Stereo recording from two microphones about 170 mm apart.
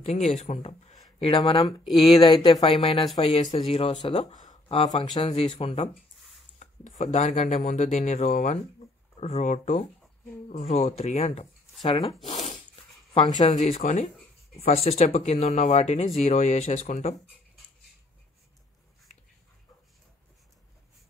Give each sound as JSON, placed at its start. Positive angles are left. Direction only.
{"t": 0.0, "sound": "speech", "side_deg": 40}
{"t": 1.9, "sound": "speech", "side_deg": 0}
{"t": 2.4, "sound": "speech", "side_deg": 30}
{"t": 4.4, "sound": "a sound", "side_deg": 40}
{"t": 5.1, "sound": "speech", "side_deg": 35}
{"t": 12.3, "sound": "zipper", "side_deg": 45}
{"t": 14.6, "sound": "speech", "side_deg": 35}